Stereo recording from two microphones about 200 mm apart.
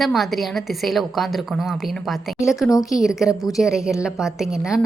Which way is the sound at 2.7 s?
20° left (ahead or behind).